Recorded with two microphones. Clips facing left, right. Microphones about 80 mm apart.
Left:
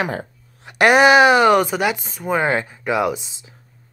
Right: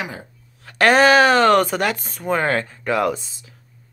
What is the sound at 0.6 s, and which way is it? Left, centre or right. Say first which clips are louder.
Speech: left 1 dB; centre.